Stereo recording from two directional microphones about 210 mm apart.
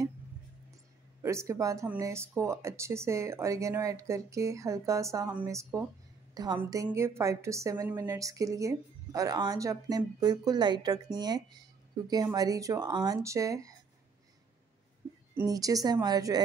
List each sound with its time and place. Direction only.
1.2 s a woman's voice: 15° right (ahead or behind)
15.3 s a woman's voice: 15° right (ahead or behind)